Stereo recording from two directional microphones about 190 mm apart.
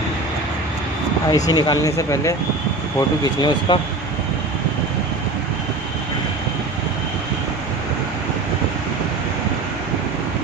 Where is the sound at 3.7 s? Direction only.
25° left (ahead or behind).